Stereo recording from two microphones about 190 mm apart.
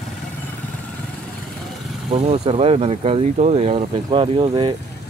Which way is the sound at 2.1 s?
30° right (ahead or behind).